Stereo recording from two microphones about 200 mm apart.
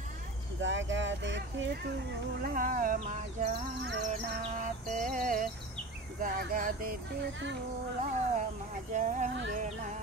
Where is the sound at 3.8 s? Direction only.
60° right (ahead or behind).